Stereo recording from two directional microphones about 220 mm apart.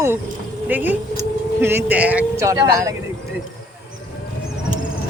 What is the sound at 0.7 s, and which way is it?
Speech, 10° right (ahead or behind).